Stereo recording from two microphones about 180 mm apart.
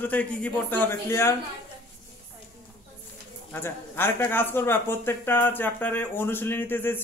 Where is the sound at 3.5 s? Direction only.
10° left (ahead or behind).